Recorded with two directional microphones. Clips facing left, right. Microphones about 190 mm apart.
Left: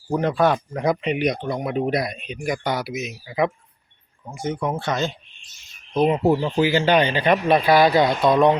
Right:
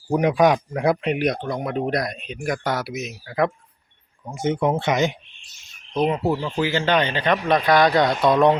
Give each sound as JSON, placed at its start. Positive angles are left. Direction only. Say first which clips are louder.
{"t": 0.1, "sound": "speech", "louder": "right 2 dB", "side_deg": -15}
{"t": 4.3, "sound": "speech", "louder": "right 4 dB", "side_deg": -20}
{"t": 6.1, "sound": "speech", "louder": "left 3 dB", "side_deg": 20}